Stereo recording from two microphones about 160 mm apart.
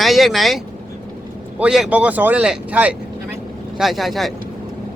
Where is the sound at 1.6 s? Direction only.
5° right (ahead or behind).